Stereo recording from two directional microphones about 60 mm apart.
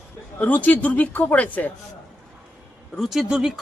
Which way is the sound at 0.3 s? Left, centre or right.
Left.